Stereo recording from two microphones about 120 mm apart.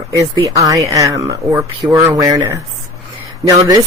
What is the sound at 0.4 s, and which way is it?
Speech, 30° right (ahead or behind).